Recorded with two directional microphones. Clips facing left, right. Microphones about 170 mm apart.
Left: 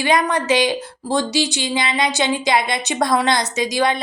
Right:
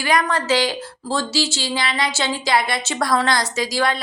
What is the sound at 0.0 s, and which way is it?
A woman's voice, 20° left (ahead or behind).